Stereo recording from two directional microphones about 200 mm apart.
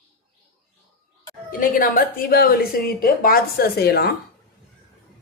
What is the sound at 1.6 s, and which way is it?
A woman's voice, 45° left (ahead or behind).